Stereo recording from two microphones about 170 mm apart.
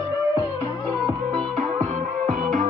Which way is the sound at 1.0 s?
25° right (ahead or behind).